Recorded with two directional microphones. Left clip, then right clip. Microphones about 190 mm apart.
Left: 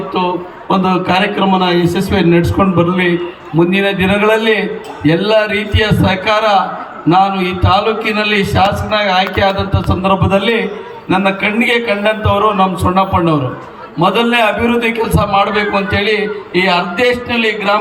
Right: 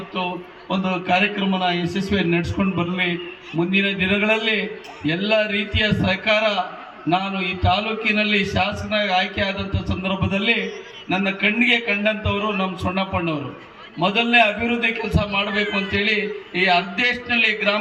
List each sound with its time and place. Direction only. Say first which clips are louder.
0.9 s a man's voice: left 4 dB; 80° left